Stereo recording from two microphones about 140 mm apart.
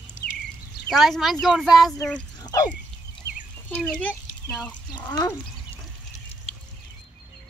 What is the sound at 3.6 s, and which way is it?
Speech, 10° left (ahead or behind).